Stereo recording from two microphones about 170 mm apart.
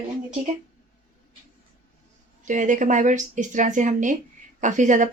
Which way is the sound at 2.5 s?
50° right (ahead or behind).